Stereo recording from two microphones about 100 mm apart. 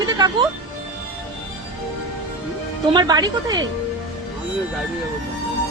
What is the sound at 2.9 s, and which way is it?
Speech, 45° right (ahead or behind).